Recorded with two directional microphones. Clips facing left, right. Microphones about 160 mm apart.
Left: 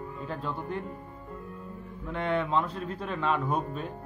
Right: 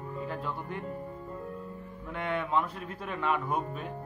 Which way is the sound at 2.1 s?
25° left (ahead or behind).